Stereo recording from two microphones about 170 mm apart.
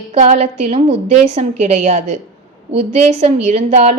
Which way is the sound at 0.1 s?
45° right (ahead or behind).